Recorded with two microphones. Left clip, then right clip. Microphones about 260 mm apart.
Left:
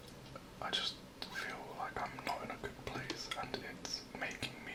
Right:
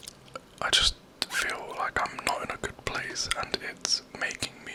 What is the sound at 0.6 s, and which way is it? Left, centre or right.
Whispering, right.